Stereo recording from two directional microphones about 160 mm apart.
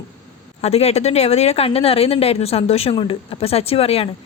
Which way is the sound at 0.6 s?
40° left (ahead or behind).